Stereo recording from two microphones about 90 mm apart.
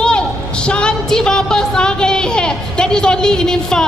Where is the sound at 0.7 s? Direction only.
10° left (ahead or behind).